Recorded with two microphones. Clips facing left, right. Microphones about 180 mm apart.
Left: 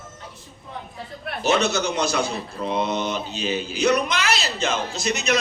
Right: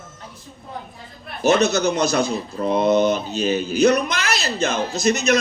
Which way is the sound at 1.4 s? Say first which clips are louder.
Right 4 dB; 45° right (ahead or behind).